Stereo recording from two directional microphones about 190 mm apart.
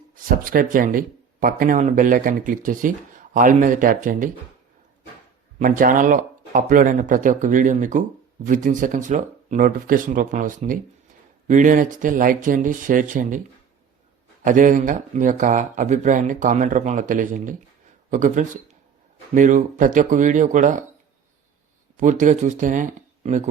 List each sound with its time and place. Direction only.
0.3 s speech: 50° right (ahead or behind)
5.5 s speech: 45° right (ahead or behind)
14.4 s speech: 45° right (ahead or behind)
21.9 s speech: 40° right (ahead or behind)